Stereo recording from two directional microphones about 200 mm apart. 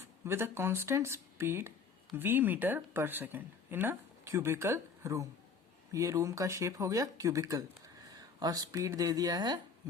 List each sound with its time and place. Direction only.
0.3 s speech: 10° right (ahead or behind)